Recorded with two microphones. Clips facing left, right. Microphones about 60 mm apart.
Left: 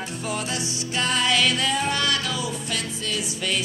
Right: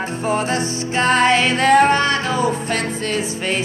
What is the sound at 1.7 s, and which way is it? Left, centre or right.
Music, right.